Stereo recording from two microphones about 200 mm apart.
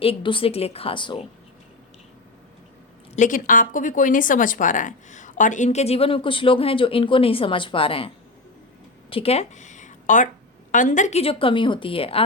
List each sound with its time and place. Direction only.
0.0 s a woman's voice: 25° left (ahead or behind)
3.2 s a woman's voice: 40° left (ahead or behind)